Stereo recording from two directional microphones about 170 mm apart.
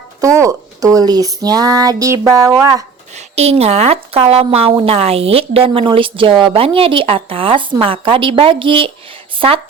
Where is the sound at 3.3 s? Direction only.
40° right (ahead or behind).